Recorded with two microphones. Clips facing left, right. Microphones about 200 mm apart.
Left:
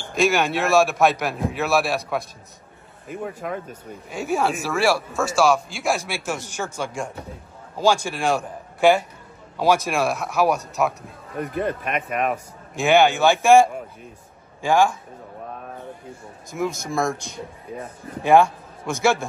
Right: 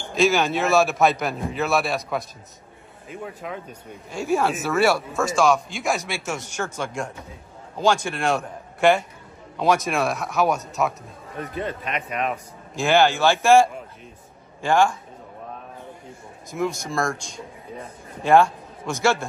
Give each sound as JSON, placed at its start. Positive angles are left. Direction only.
{"t": 0.1, "sound": "a man's voice", "side_deg": 0}
{"t": 3.4, "sound": "speech", "side_deg": 0}
{"t": 11.3, "sound": "speech", "side_deg": 50}
{"t": 12.2, "sound": "speech", "side_deg": 5}
{"t": 16.4, "sound": "speech", "side_deg": 0}
{"t": 18.3, "sound": "a man's voice", "side_deg": 0}